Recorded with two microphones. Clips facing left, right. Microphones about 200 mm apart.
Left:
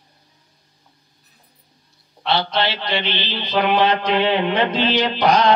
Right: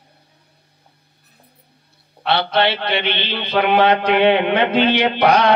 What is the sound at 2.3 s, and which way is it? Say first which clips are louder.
Music: right 3 dB; 65° right (ahead or behind).